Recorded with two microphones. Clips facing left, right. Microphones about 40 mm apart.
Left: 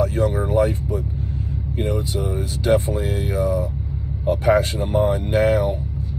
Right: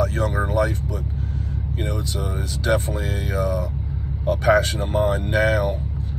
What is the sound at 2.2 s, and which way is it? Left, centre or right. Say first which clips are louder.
Speech: left 2 dB; right.